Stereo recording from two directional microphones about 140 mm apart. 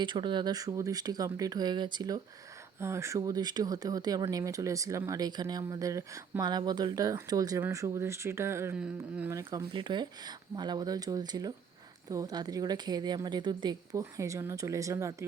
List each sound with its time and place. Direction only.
0.0 s speech: 35° right (ahead or behind); by 9.3 s 10° right (ahead or behind)
9.3 s speech: 20° right (ahead or behind)
9.7 s a woman's voice: 35° right (ahead or behind)
13.9 s speech: 20° right (ahead or behind)